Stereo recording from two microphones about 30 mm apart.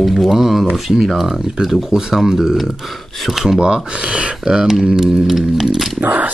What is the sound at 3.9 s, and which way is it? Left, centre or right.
Speech, right.